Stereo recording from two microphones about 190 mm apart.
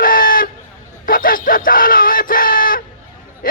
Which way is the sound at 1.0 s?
45° left (ahead or behind).